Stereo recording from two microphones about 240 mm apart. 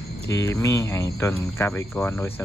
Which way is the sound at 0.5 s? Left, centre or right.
Centre.